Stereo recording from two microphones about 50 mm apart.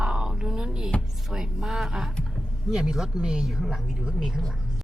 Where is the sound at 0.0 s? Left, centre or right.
Centre.